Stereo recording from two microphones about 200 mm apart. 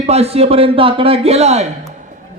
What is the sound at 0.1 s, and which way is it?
A man's voice, 30° right (ahead or behind).